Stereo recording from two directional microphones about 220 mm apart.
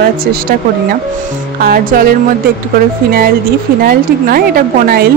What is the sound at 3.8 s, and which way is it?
A woman's voice, 40° right (ahead or behind).